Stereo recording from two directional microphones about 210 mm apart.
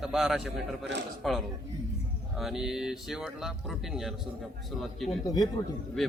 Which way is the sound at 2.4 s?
Centre (ahead or behind).